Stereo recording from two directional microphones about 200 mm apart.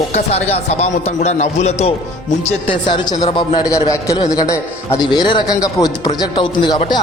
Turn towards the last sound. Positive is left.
turn(degrees=20)  # may be behind; listen again after turning